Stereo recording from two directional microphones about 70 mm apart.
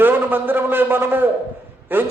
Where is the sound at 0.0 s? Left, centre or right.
Right.